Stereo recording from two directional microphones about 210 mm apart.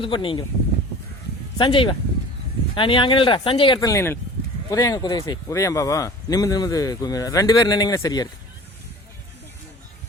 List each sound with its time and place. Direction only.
0.0 s speech: 25° left (ahead or behind)
1.5 s speech: 25° left (ahead or behind)